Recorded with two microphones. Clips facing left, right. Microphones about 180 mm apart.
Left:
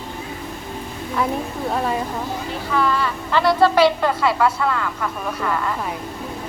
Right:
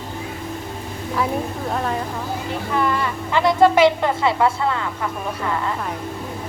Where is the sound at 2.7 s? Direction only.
20° right (ahead or behind).